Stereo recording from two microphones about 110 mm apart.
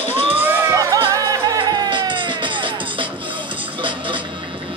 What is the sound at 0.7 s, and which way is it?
Music, 30° right (ahead or behind).